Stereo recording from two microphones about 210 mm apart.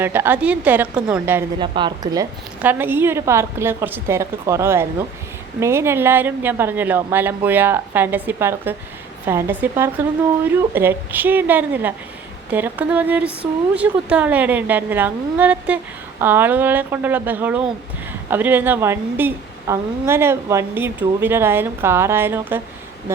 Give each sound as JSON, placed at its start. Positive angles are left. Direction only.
{"t": 0.0, "sound": "a woman's voice", "side_deg": -10}
{"t": 1.5, "sound": "a woman's voice", "side_deg": -20}
{"t": 2.6, "sound": "a woman's voice", "side_deg": -10}